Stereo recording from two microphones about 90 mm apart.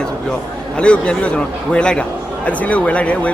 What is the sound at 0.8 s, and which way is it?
Speech, 10° left (ahead or behind).